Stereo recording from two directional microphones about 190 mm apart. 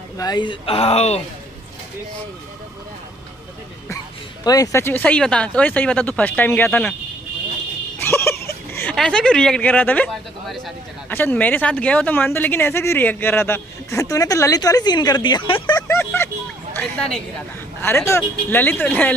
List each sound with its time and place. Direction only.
0.2 s speech: 20° left (ahead or behind)
4.5 s speech: 15° left (ahead or behind)
8.0 s a sound: 15° left (ahead or behind)
8.9 s speech: 5° left (ahead or behind); by 15.8 s 25° left (ahead or behind)
15.9 s music: 10° left (ahead or behind)
16.7 s a woman's voice: 5° left (ahead or behind)